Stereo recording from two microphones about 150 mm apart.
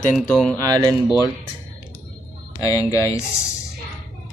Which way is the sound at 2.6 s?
20° left (ahead or behind).